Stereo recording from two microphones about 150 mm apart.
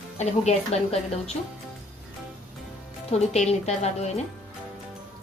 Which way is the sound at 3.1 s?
45° left (ahead or behind).